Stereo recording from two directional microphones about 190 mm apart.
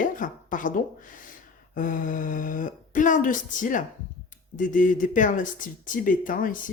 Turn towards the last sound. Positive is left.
turn(degrees=45)  # may be behind; listen again after turning